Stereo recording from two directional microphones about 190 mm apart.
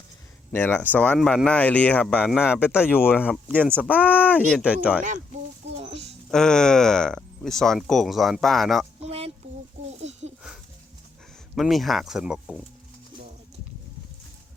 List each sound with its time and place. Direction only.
0.5 s speech: 10° left (ahead or behind); by 4.3 s 5° right (ahead or behind)
4.3 s speech: 10° left (ahead or behind)
4.5 s speech: 5° right (ahead or behind)
5.8 s a sound: 35° right (ahead or behind)
6.3 s speech: 5° left (ahead or behind)
9.0 s a sound: 30° right (ahead or behind)
11.5 s speech: centre (ahead or behind)